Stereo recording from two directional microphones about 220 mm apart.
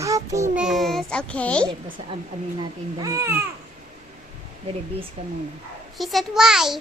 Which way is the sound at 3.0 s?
15° right (ahead or behind).